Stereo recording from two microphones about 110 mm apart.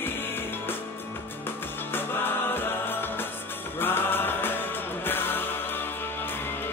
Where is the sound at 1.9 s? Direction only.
20° left (ahead or behind).